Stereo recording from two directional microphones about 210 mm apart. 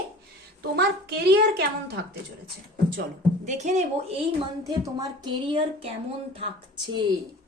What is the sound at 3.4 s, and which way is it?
Speech, 35° right (ahead or behind).